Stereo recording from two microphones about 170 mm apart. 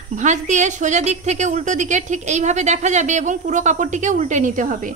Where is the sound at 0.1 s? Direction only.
45° right (ahead or behind).